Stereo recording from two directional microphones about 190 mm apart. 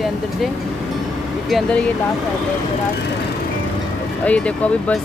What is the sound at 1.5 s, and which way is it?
Speech, 5° left (ahead or behind).